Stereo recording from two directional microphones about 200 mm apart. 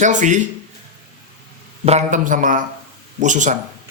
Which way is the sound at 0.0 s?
40° right (ahead or behind).